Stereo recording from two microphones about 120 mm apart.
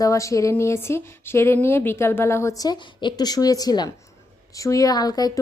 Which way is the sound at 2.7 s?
35° left (ahead or behind).